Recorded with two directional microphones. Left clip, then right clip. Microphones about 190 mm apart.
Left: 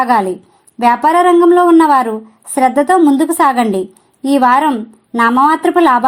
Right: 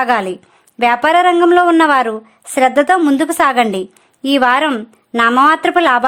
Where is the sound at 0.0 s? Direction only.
25° right (ahead or behind).